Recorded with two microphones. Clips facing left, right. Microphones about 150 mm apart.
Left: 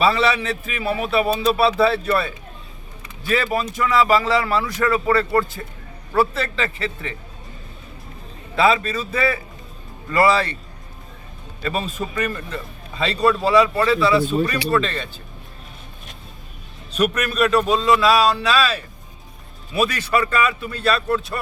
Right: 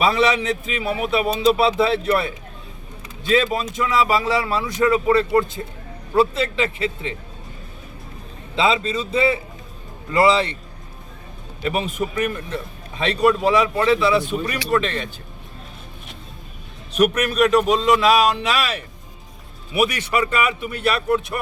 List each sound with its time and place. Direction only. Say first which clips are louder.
0.0 s a man's voice: even; 15° right (ahead or behind)
8.5 s a man's voice: left 2 dB; 20° right (ahead or behind)
11.6 s a man's voice: right 2 dB; 15° right (ahead or behind)
13.8 s a man's voice: even; 20° right (ahead or behind)
16.9 s a man's voice: right 3 dB; 10° right (ahead or behind)